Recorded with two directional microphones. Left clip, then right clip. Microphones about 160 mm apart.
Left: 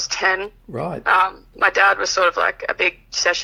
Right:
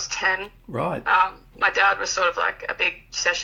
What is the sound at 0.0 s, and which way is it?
Speech, 45° left (ahead or behind).